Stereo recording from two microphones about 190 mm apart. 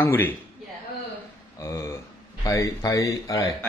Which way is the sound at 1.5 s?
15° left (ahead or behind).